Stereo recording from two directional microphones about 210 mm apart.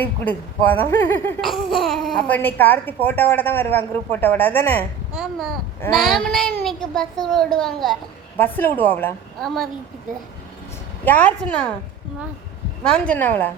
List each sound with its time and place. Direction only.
0.0 s speech: 10° left (ahead or behind)
5.1 s a child's voice: 5° right (ahead or behind)
11.0 s a child's voice: 5° left (ahead or behind)
12.8 s speech: 5° left (ahead or behind)